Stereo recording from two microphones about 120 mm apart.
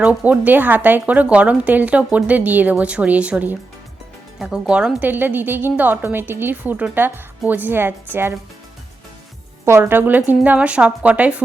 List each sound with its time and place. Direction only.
0.0 s speech: 10° right (ahead or behind)
9.6 s speech: 20° right (ahead or behind)